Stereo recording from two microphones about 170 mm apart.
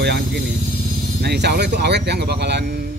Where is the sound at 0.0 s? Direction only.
75° right (ahead or behind).